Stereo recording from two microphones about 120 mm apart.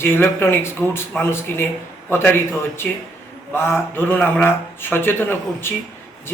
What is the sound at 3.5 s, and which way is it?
A man's voice, 20° left (ahead or behind).